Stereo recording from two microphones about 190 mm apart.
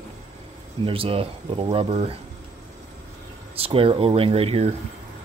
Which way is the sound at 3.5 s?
30° right (ahead or behind).